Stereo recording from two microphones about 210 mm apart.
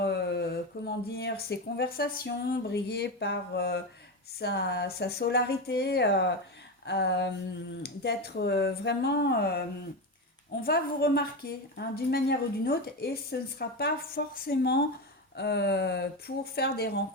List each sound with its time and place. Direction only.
0.0 s speech: 50° left (ahead or behind)